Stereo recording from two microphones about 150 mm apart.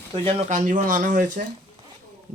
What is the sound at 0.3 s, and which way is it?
Speech, 50° right (ahead or behind).